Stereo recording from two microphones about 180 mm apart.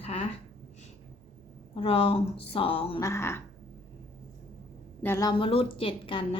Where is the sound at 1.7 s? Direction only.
30° left (ahead or behind).